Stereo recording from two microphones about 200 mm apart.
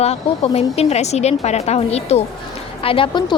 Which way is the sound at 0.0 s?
30° left (ahead or behind).